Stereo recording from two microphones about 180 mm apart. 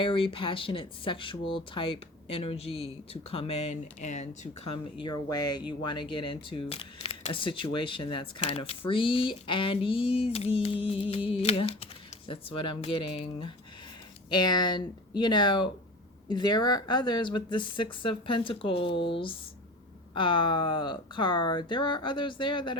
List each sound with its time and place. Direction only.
0.0 s speech: 30° left (ahead or behind)
8.9 s a sound: 30° left (ahead or behind)
12.3 s speech: 30° left (ahead or behind)